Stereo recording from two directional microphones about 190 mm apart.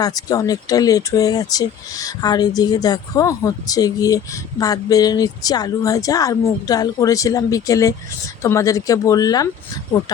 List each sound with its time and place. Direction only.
0.0 s speech: 20° left (ahead or behind)